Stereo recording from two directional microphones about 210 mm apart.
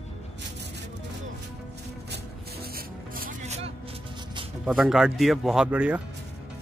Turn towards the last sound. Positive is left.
turn(degrees=-5)  # may be behind; listen again after turning